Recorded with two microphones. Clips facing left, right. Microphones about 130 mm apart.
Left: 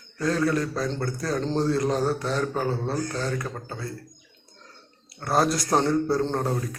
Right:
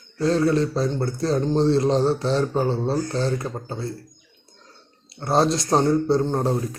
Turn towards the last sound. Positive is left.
turn(degrees=-25)  # may be behind; listen again after turning